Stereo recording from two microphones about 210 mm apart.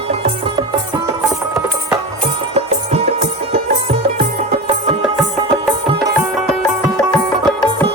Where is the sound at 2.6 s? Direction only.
30° right (ahead or behind).